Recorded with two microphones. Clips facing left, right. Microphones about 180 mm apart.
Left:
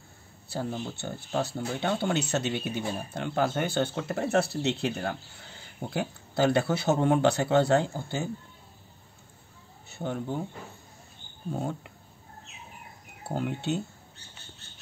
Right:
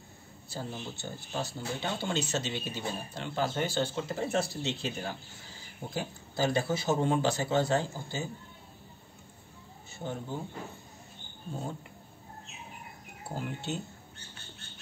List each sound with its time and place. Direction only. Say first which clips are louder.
0.5 s speech: left 6 dB; 60° left (ahead or behind)
9.8 s speech: left 5 dB; 65° left (ahead or behind)
13.3 s speech: left 6 dB; 60° left (ahead or behind)